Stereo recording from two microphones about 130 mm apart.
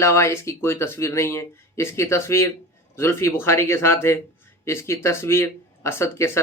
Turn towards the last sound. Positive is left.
turn(degrees=20)  # may be behind; listen again after turning